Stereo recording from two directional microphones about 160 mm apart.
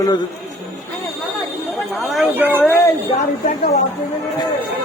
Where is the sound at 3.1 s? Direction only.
45° left (ahead or behind).